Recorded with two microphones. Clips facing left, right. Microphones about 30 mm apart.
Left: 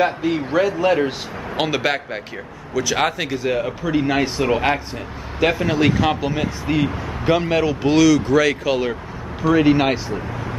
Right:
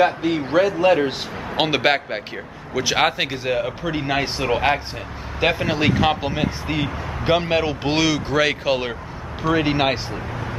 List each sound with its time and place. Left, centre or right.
0.0 s a man's voice: centre
1.6 s speech: right
3.4 s a man's voice: centre